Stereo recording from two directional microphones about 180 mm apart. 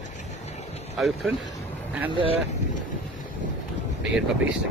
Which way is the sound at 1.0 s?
Centre (ahead or behind).